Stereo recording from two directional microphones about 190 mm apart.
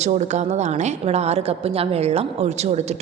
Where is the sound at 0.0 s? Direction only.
35° right (ahead or behind).